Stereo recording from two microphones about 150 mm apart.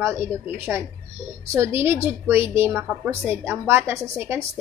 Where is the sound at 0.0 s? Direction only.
15° right (ahead or behind).